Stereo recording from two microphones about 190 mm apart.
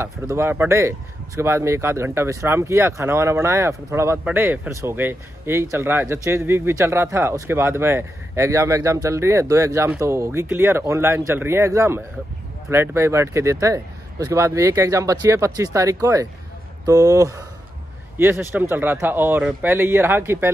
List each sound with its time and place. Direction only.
0.0 s speech: 15° right (ahead or behind)